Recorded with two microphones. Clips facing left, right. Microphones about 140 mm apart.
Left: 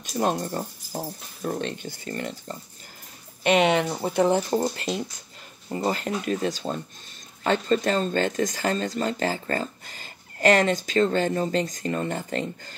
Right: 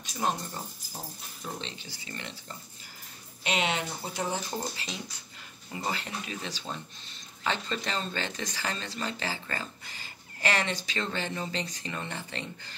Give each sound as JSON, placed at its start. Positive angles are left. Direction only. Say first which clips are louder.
{"t": 0.1, "sound": "speech", "louder": "left 7 dB", "side_deg": 55}
{"t": 3.4, "sound": "speech", "louder": "left 10 dB", "side_deg": 55}